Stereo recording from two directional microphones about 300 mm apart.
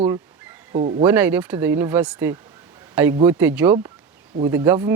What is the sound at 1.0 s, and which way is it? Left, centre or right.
Speech, centre.